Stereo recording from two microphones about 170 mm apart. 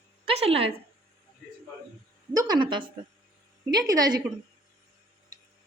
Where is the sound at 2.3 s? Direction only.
20° right (ahead or behind).